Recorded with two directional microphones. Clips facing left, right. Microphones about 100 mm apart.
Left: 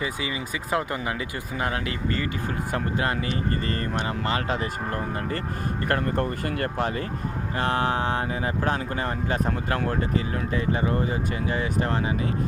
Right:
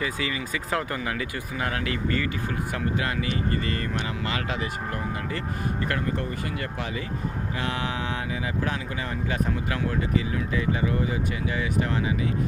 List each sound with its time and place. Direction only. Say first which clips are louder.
0.0 s speech: even; 20° left (ahead or behind); by 5.4 s 35° left (ahead or behind)
5.9 s speech: left 3 dB; 50° left (ahead or behind)